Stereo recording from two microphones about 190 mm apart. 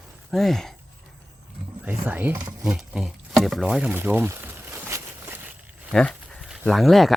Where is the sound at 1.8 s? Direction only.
10° right (ahead or behind).